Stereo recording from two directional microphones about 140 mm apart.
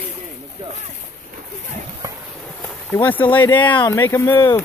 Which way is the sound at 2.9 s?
15° left (ahead or behind).